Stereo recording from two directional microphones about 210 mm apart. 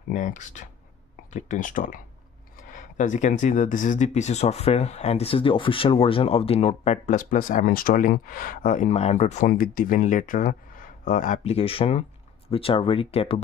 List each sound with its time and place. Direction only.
0.1 s speech: 35° left (ahead or behind)